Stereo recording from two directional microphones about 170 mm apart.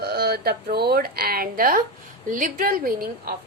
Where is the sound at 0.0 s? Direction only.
65° right (ahead or behind).